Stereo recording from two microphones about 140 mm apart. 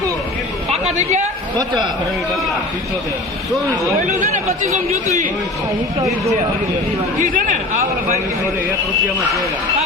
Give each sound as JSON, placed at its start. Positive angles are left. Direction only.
{"t": 1.5, "sound": "a man's voice", "side_deg": -35}
{"t": 6.1, "sound": "speech", "side_deg": -50}
{"t": 7.2, "sound": "speech", "side_deg": -80}